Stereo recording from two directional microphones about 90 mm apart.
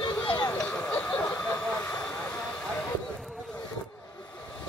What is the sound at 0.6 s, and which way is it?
Vehicle, 20° left (ahead or behind).